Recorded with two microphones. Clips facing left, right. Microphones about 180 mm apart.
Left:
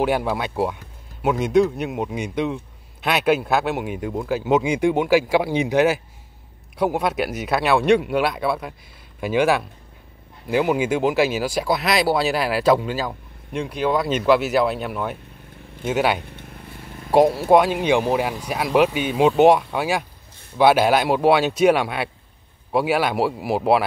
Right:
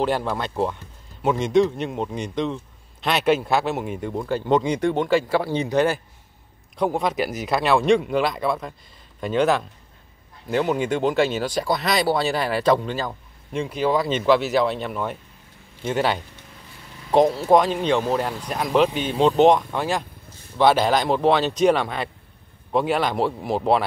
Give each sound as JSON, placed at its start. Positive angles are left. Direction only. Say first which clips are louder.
{"t": 0.0, "sound": "speech", "louder": "left 2 dB", "side_deg": 10}
{"t": 16.3, "sound": "vehicle", "louder": "left 6 dB", "side_deg": 55}
{"t": 17.1, "sound": "speech", "louder": "left 2 dB", "side_deg": 10}